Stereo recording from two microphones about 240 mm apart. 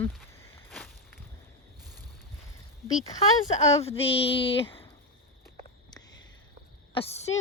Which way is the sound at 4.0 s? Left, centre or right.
Left.